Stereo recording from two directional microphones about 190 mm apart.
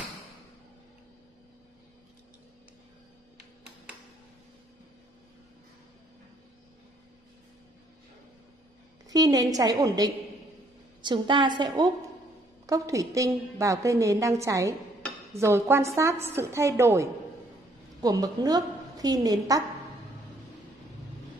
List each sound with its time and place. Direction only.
9.1 s a woman's voice: 20° right (ahead or behind)